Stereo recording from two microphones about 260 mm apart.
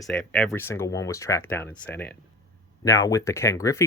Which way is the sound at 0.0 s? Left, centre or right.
Centre.